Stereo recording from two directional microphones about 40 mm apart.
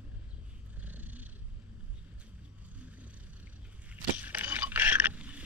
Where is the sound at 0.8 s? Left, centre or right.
Right.